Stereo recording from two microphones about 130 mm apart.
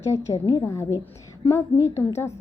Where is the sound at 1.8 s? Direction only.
20° left (ahead or behind).